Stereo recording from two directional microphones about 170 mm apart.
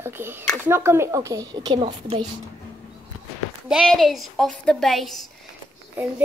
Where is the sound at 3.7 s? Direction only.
Centre (ahead or behind).